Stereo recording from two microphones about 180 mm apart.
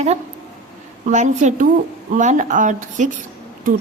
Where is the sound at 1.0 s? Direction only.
40° right (ahead or behind).